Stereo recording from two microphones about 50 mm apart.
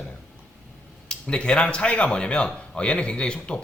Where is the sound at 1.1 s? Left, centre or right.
Centre.